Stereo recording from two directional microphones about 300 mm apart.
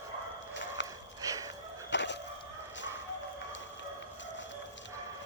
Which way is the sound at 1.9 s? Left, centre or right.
Left.